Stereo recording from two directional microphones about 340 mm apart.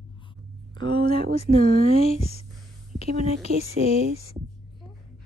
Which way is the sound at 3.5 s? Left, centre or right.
Right.